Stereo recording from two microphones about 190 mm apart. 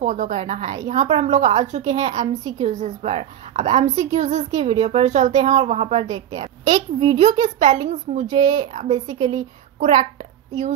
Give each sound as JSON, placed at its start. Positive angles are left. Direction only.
{"t": 0.0, "sound": "a woman's voice", "side_deg": -40}
{"t": 6.0, "sound": "a woman's voice", "side_deg": -20}